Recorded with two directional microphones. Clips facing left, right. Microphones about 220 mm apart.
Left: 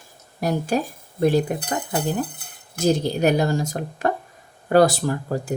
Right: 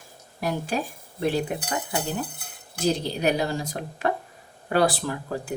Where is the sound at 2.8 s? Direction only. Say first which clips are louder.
Left 5 dB; 45° left (ahead or behind).